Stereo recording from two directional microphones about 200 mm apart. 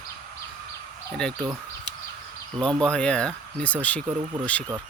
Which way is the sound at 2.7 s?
5° left (ahead or behind).